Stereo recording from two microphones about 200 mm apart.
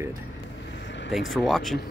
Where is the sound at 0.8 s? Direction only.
60° left (ahead or behind).